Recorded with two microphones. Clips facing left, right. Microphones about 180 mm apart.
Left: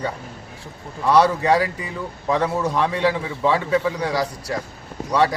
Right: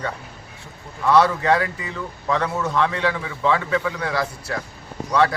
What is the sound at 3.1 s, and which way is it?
Speech, 25° left (ahead or behind).